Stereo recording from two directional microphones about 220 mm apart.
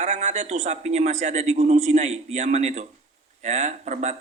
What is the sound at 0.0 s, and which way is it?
Speech, 30° right (ahead or behind).